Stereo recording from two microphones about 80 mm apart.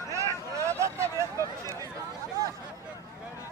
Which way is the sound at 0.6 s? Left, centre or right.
Right.